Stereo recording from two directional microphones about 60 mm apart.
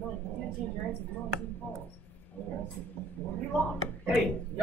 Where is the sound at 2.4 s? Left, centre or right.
Left.